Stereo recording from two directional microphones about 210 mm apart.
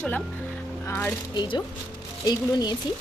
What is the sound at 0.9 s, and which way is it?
Speech, 10° left (ahead or behind).